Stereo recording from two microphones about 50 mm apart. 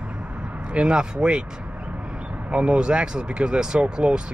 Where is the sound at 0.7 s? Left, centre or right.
Centre.